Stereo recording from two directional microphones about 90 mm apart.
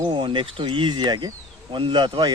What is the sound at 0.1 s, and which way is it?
A man's voice, 70° right (ahead or behind).